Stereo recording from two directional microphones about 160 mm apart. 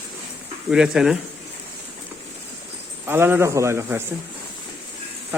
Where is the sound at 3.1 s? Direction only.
15° right (ahead or behind).